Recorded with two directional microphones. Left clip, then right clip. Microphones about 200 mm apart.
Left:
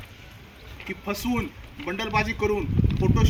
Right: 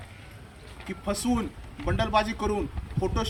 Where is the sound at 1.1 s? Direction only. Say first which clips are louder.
Even; 10° right (ahead or behind).